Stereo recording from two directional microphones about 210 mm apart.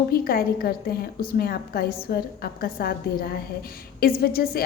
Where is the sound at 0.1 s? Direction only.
45° left (ahead or behind).